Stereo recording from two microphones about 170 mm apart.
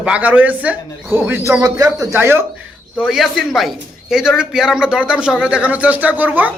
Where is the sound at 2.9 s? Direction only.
Centre (ahead or behind).